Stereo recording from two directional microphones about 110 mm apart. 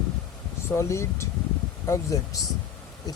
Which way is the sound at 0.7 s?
25° left (ahead or behind).